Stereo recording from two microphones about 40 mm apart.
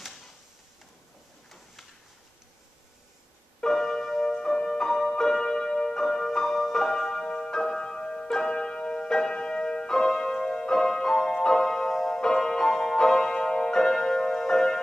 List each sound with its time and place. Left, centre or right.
3.7 s music: centre
4.4 s music: centre